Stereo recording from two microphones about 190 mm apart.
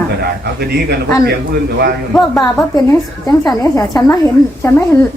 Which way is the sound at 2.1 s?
Centre (ahead or behind).